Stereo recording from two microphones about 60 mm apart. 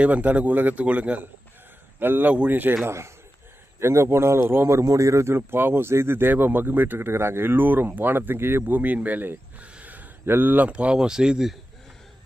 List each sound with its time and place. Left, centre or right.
0.0 s a man's voice: right
2.8 s speech: right
4.7 s speech: right
8.7 s a man's voice: right
9.6 s a sound: right
10.2 s speech: right
10.7 s speech: centre